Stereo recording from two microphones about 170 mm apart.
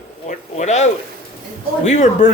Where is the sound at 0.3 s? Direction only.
40° left (ahead or behind).